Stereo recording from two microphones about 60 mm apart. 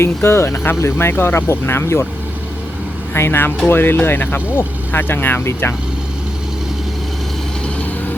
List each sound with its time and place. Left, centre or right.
0.0 s speech: left
3.2 s speech: left